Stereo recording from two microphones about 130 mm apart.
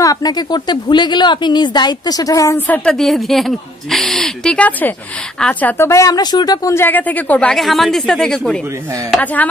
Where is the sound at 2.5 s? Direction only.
15° left (ahead or behind).